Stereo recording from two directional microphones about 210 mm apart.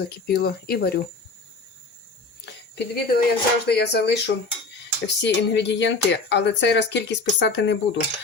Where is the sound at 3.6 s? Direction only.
50° left (ahead or behind).